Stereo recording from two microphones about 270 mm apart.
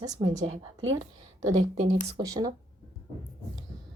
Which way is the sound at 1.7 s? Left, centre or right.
Right.